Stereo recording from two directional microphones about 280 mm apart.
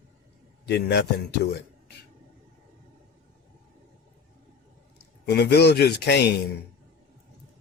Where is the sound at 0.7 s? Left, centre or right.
Left.